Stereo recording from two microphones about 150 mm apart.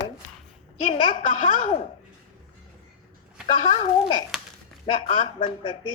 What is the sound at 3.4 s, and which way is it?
A woman's voice, 40° left (ahead or behind).